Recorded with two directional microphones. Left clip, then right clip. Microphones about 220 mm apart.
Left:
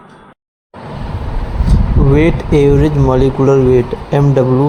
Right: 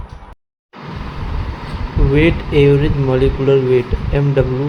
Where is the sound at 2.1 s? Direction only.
25° left (ahead or behind).